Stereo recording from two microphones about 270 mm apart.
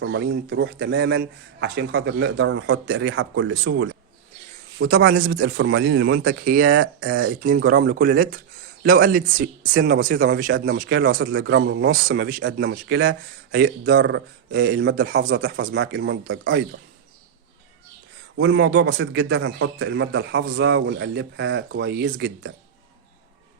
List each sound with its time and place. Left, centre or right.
0.0 s speech: right
4.9 s speech: right
15.4 s speech: right
18.3 s a man's voice: right